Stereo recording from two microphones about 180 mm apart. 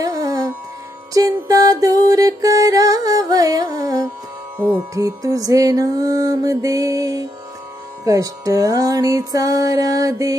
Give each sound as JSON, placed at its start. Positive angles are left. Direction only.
{"t": 0.0, "sound": "music", "side_deg": -20}